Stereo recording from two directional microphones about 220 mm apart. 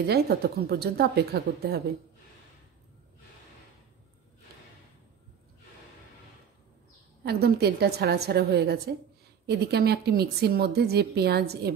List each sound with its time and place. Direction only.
0.0 s a woman's voice: 45° right (ahead or behind)
7.2 s a woman's voice: 45° right (ahead or behind)